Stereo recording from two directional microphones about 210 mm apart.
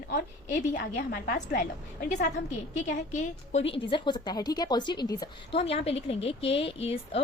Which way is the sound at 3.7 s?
25° left (ahead or behind).